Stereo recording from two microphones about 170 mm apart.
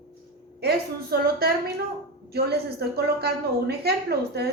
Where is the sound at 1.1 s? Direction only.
65° right (ahead or behind).